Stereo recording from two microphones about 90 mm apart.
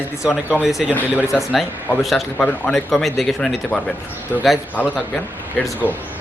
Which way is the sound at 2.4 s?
15° left (ahead or behind).